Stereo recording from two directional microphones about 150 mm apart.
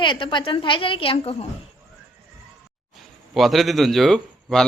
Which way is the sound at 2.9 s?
Centre (ahead or behind).